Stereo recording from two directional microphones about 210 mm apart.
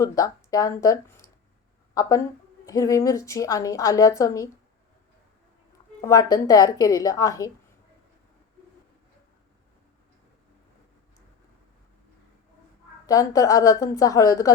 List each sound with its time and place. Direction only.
0.0 s a woman's voice: 15° left (ahead or behind)
6.0 s a woman's voice: 15° left (ahead or behind)
13.1 s a woman's voice: 15° left (ahead or behind)